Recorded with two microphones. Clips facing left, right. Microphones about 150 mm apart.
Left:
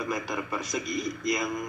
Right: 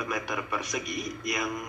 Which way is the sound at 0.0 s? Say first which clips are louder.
Left 1 dB; 25° left (ahead or behind).